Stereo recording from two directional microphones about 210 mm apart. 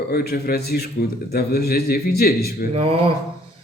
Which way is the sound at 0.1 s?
50° left (ahead or behind).